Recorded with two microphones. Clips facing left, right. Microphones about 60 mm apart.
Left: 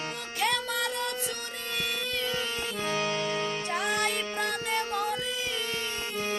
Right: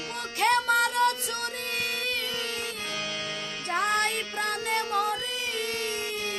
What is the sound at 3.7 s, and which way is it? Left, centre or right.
Music, right.